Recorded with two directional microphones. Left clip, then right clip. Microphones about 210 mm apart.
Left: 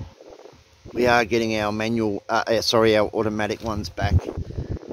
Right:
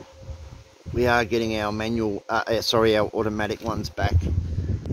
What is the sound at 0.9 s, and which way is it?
Speech, 20° left (ahead or behind).